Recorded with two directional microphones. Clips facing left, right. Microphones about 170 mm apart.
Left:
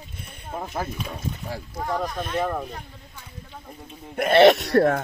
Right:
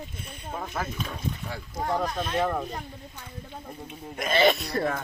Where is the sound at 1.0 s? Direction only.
10° left (ahead or behind).